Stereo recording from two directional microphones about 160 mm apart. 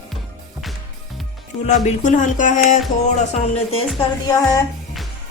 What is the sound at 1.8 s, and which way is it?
Speech, 50° left (ahead or behind).